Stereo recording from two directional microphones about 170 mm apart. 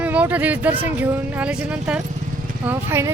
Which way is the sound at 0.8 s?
10° right (ahead or behind).